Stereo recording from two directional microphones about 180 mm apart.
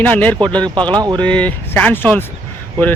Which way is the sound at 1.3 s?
10° left (ahead or behind).